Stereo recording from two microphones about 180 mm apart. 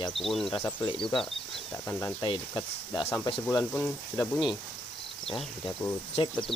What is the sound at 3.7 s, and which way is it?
Speech, 5° left (ahead or behind).